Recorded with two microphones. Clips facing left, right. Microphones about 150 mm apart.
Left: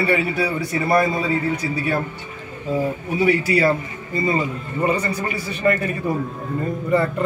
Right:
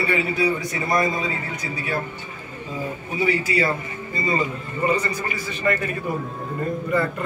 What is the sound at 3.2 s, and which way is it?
Speech, 65° left (ahead or behind).